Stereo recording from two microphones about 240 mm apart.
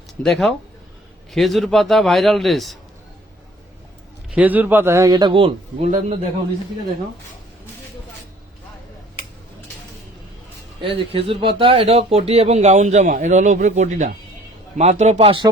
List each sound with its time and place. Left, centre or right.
0.2 s a man's voice: centre
4.4 s a man's voice: centre; by 6.1 s right
10.8 s speech: right